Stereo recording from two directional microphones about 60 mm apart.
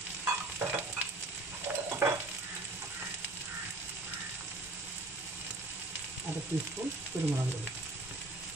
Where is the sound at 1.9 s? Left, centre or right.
Right.